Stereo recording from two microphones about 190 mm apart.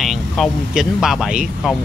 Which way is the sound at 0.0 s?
Centre (ahead or behind).